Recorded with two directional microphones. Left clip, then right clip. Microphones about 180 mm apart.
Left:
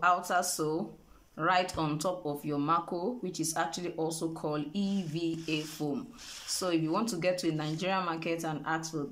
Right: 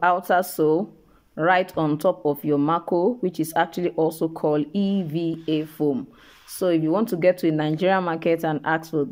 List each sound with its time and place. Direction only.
0.0 s speech: 45° right (ahead or behind)